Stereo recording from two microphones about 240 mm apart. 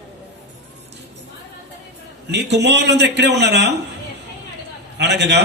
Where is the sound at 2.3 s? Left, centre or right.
Right.